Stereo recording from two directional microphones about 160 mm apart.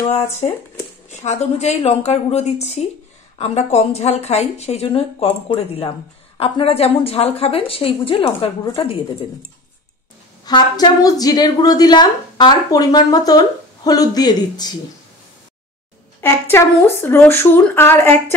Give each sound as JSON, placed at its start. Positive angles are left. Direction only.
{"t": 1.2, "sound": "a woman's voice", "side_deg": 45}
{"t": 10.4, "sound": "a woman's voice", "side_deg": 25}
{"t": 16.2, "sound": "speech", "side_deg": 15}